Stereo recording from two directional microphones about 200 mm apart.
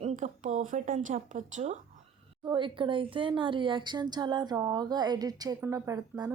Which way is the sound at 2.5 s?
25° right (ahead or behind).